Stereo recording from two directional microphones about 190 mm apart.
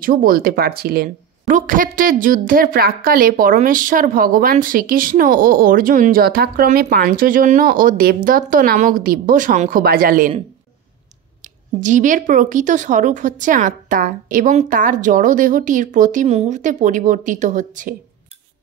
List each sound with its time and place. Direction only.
0.0 s a woman's voice: 50° right (ahead or behind)
11.4 s a woman's voice: 40° right (ahead or behind)